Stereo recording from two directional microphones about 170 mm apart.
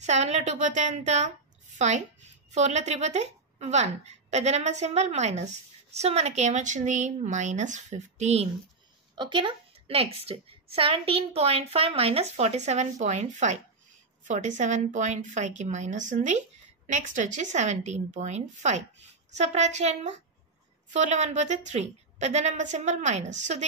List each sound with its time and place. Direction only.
0.0 s a woman's voice: 40° right (ahead or behind)
9.1 s a woman's voice: 25° right (ahead or behind); by 23.6 s 45° right (ahead or behind)